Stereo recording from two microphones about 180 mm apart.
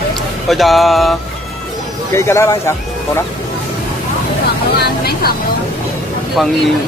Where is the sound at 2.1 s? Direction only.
15° left (ahead or behind).